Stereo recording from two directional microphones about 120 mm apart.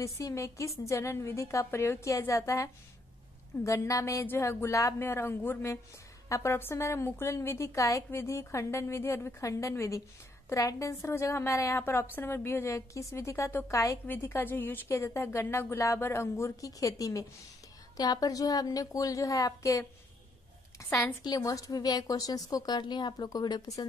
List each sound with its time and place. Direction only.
0.0 s a woman's voice: 25° left (ahead or behind)
21.0 s a woman's voice: 30° left (ahead or behind)